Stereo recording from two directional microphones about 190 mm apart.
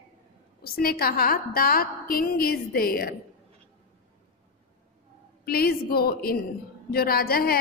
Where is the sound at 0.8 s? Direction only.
50° left (ahead or behind).